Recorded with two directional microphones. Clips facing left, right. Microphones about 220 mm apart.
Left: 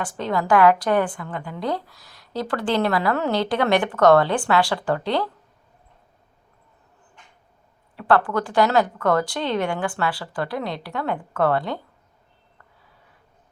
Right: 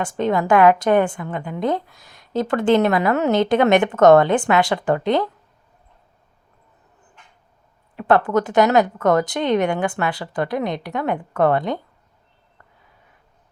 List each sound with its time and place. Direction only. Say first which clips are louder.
0.2 s a woman's voice: right 3 dB; 20° right (ahead or behind)
7.9 s a woman's voice: right 3 dB; 20° right (ahead or behind)